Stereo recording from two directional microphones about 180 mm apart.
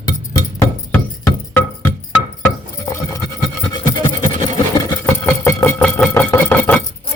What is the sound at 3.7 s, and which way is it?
Engine, 20° left (ahead or behind).